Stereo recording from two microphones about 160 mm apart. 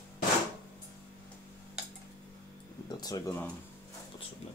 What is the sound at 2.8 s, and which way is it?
Speech, 25° left (ahead or behind).